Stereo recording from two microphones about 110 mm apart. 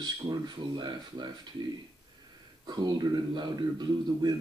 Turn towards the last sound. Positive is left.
turn(degrees=-40)  # may be behind; listen again after turning